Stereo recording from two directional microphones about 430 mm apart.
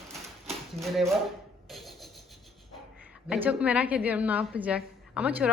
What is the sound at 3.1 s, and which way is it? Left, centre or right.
A woman's voice, centre.